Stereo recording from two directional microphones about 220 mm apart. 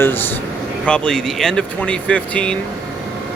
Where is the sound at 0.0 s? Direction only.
10° left (ahead or behind).